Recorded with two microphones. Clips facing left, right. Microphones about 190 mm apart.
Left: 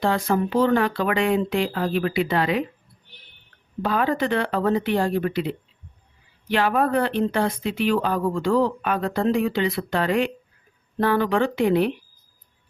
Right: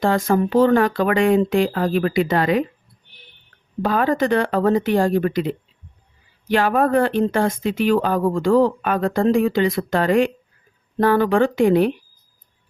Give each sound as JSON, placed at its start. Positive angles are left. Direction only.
{"t": 0.3, "sound": "speech", "side_deg": -45}
{"t": 3.8, "sound": "speech", "side_deg": -45}